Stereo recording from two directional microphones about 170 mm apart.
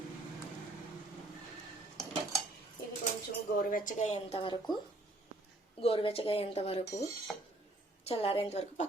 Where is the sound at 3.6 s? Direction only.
50° left (ahead or behind); by 4.6 s 30° left (ahead or behind).